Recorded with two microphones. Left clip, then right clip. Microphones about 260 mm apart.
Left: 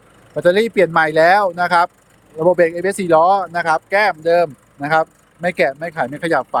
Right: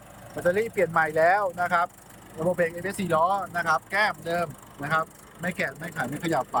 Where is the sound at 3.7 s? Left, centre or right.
Centre.